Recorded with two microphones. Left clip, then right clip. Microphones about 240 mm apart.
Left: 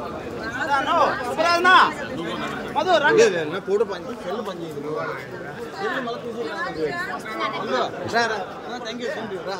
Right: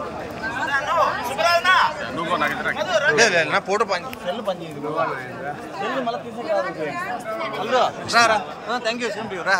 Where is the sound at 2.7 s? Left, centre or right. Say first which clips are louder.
Left 8 dB; left.